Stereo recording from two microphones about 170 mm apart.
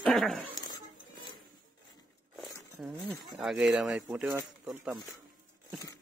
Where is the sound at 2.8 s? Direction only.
Centre (ahead or behind).